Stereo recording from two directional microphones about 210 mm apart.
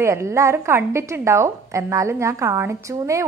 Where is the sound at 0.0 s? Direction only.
15° right (ahead or behind).